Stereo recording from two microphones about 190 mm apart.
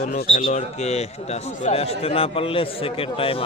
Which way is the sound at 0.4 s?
35° left (ahead or behind).